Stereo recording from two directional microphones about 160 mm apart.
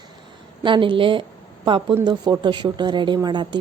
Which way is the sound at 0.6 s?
30° right (ahead or behind).